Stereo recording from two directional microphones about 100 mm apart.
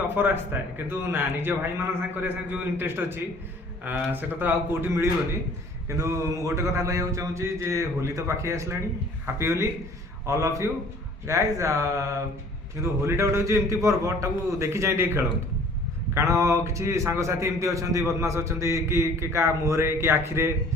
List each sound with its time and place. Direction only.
0.2 s a man's voice: 20° right (ahead or behind)
5.9 s a man's voice: 30° right (ahead or behind)